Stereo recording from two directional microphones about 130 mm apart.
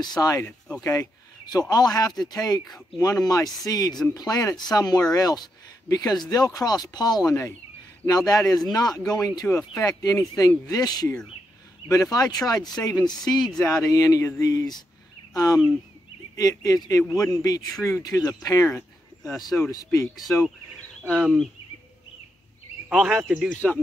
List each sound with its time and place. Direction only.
0.0 s speech: 30° left (ahead or behind)
13.4 s speech: 5° left (ahead or behind)
13.8 s speech: 25° left (ahead or behind)
17.0 s speech: centre (ahead or behind)
17.3 s speech: 25° left (ahead or behind)
21.2 s speech: centre (ahead or behind)
22.8 s speech: centre (ahead or behind)